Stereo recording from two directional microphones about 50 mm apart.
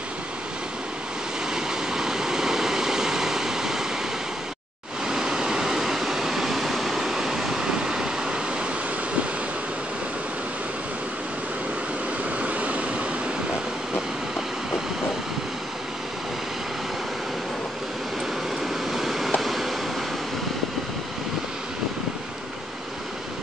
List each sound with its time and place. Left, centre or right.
1.5 s vehicle: centre
5.0 s waves: centre
12.4 s vehicle: right
18.6 s vehicle: centre
19.4 s a sound: centre